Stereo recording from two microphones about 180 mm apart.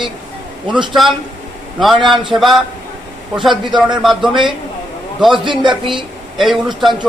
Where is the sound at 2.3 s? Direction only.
Centre (ahead or behind).